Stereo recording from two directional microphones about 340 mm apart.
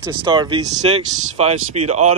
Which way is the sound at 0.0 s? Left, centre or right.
Centre.